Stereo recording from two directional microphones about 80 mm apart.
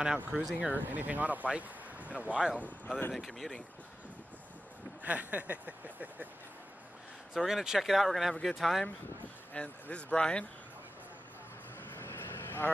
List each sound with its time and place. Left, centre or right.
0.3 s speech: centre
0.7 s speech: right
2.5 s speech: centre
5.0 s speech: centre
7.3 s speech: centre
9.5 s speech: centre
11.9 s vehicle: left